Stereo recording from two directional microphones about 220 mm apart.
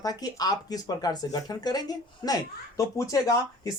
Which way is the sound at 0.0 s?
15° left (ahead or behind).